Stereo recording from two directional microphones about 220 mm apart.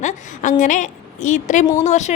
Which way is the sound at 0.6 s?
35° left (ahead or behind).